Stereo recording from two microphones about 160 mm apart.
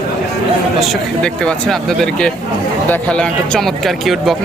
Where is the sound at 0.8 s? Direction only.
5° left (ahead or behind).